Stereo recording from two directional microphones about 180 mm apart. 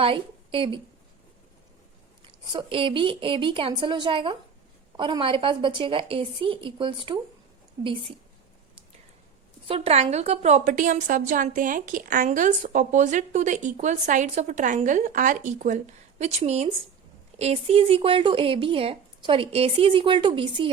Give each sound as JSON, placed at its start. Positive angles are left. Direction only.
{"t": 0.0, "sound": "a woman's voice", "side_deg": -30}
{"t": 2.2, "sound": "speech", "side_deg": -25}
{"t": 9.6, "sound": "a woman's voice", "side_deg": -30}